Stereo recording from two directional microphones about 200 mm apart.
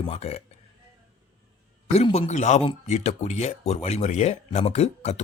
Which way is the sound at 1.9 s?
30° left (ahead or behind).